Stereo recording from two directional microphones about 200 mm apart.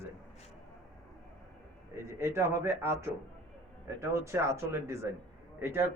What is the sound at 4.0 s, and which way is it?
A man's voice, 15° right (ahead or behind).